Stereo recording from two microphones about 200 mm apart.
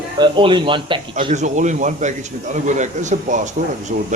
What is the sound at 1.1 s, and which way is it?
Speech, 35° right (ahead or behind).